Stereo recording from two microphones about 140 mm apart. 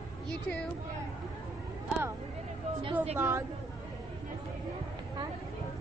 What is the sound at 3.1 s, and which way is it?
Speech, 20° right (ahead or behind).